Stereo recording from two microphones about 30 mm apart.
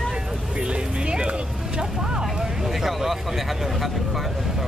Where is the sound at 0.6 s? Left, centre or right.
Right.